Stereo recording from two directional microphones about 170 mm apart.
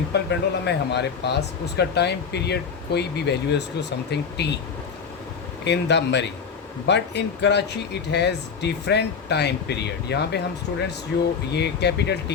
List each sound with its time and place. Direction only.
0.1 s speech: 85° left
5.6 s speech: 90° left